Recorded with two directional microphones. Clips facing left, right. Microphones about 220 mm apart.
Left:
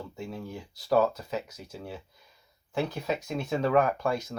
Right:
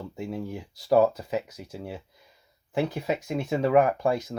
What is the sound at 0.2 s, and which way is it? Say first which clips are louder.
Speech: right 6 dB; 20° right (ahead or behind).